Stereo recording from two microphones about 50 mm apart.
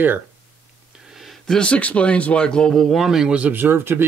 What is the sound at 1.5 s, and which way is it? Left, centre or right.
A man's voice, left.